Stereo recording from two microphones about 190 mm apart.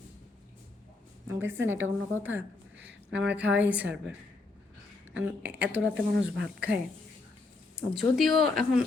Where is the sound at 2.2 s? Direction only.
10° right (ahead or behind).